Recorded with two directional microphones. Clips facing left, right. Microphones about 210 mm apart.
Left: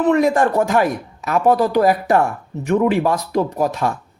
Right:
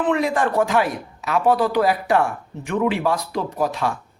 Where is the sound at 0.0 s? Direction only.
45° left (ahead or behind).